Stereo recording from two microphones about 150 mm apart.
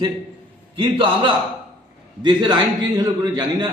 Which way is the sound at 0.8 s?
35° right (ahead or behind).